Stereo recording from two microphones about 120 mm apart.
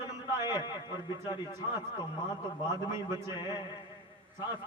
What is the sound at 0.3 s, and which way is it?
Speech, 25° right (ahead or behind).